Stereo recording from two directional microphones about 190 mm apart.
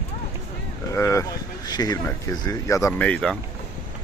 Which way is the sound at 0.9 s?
15° left (ahead or behind).